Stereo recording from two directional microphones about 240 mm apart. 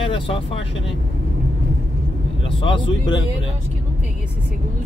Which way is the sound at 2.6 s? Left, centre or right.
Centre.